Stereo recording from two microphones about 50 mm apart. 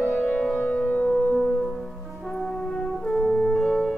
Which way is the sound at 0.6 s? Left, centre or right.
Centre.